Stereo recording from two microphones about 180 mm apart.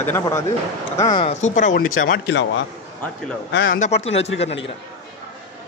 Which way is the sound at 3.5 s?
55° left (ahead or behind).